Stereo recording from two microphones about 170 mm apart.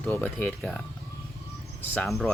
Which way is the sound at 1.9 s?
5° left (ahead or behind).